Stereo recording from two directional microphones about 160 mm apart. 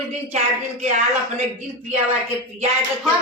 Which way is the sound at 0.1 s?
45° right (ahead or behind).